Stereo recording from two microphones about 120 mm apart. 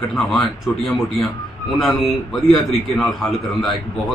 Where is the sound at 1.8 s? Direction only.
Centre (ahead or behind).